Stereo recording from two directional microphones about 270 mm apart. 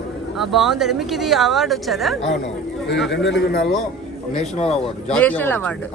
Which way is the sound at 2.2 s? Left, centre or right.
Left.